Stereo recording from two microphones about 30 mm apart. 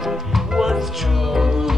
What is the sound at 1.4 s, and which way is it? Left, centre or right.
Music, centre.